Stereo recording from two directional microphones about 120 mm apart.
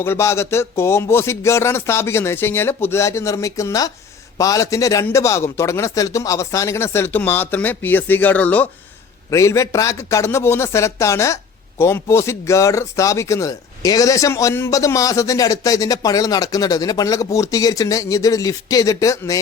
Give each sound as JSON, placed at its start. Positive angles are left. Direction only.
{"t": 0.0, "sound": "speech", "side_deg": 20}
{"t": 9.3, "sound": "speech", "side_deg": 25}